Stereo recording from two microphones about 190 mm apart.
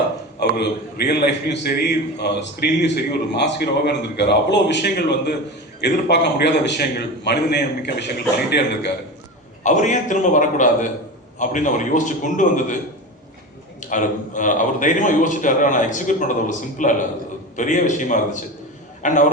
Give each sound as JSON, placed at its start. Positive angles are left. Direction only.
{"t": 0.3, "sound": "a man's voice", "side_deg": 60}
{"t": 9.6, "sound": "a man's voice", "side_deg": 40}
{"t": 13.9, "sound": "a man's voice", "side_deg": 45}